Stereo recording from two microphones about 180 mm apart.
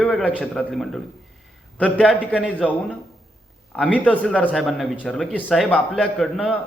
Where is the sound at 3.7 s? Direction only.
5° left (ahead or behind).